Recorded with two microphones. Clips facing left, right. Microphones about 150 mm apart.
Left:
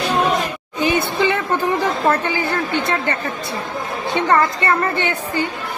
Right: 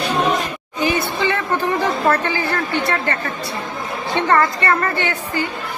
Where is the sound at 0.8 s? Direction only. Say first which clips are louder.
Left 2 dB; 20° left (ahead or behind).